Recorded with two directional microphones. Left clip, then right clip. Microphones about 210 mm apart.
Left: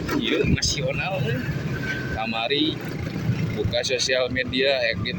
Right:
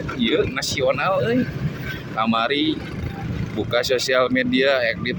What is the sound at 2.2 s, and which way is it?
Speech, 35° right (ahead or behind).